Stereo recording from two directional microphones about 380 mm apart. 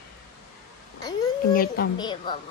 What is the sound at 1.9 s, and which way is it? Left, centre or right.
Speech, centre.